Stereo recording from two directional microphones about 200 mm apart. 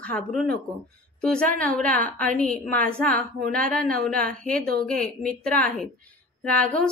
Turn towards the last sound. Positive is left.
turn(degrees=5)  # may be behind; listen again after turning